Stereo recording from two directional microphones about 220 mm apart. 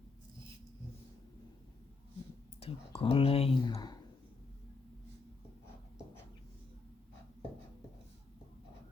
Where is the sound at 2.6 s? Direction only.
25° left (ahead or behind).